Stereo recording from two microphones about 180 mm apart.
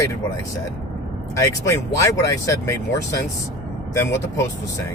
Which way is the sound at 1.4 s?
15° left (ahead or behind).